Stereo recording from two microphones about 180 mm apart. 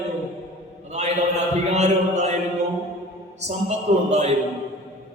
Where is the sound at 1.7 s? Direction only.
40° right (ahead or behind).